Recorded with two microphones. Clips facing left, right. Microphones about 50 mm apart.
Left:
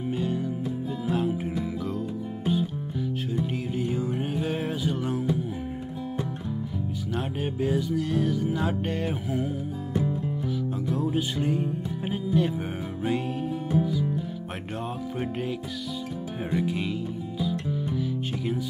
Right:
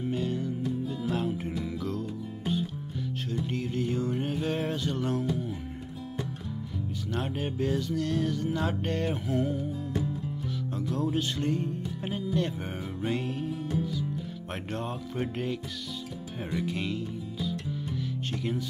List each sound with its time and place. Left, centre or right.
0.0 s music: centre
7.2 s music: centre
9.9 s music: left
10.9 s music: centre
16.5 s music: centre